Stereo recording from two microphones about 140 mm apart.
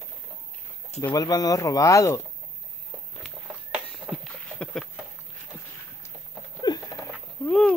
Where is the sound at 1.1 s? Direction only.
25° left (ahead or behind).